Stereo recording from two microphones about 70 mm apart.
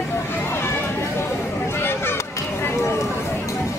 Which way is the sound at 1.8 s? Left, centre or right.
Left.